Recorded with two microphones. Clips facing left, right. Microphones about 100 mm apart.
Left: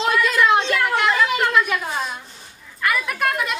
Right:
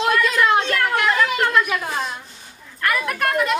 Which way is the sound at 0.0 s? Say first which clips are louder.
Even; centre (ahead or behind).